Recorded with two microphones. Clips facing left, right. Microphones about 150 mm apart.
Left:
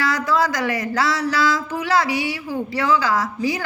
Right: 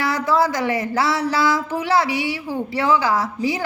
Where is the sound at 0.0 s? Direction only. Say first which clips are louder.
Right 1 dB; 25° right (ahead or behind).